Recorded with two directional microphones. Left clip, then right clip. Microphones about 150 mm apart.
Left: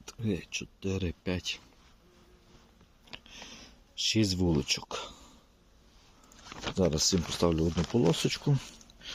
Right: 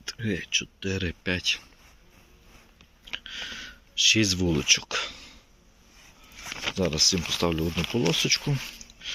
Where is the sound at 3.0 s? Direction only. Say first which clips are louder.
Right 12 dB; 20° left (ahead or behind).